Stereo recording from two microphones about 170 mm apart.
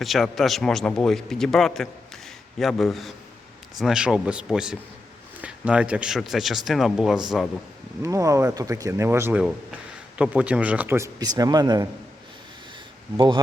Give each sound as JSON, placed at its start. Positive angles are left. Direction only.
{"t": 0.0, "sound": "a man's voice", "side_deg": 0}
{"t": 8.0, "sound": "speech", "side_deg": -20}
{"t": 13.1, "sound": "speech", "side_deg": -25}